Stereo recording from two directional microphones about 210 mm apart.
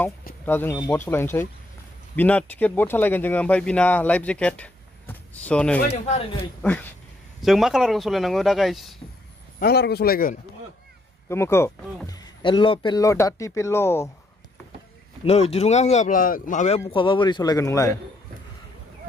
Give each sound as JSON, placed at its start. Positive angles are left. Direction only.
{"t": 0.5, "sound": "speech", "side_deg": 10}
{"t": 5.9, "sound": "speech", "side_deg": 30}
{"t": 6.6, "sound": "speech", "side_deg": 5}
{"t": 9.6, "sound": "speech", "side_deg": 50}
{"t": 11.2, "sound": "speech", "side_deg": 10}
{"t": 15.2, "sound": "speech", "side_deg": 30}